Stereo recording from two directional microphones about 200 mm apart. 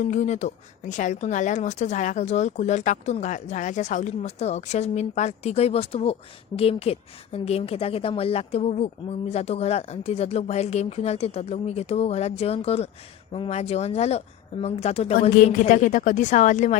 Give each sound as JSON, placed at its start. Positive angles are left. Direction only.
{"t": 0.0, "sound": "a woman's voice", "side_deg": 35}